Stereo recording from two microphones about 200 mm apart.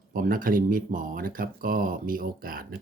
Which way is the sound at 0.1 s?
45° right (ahead or behind).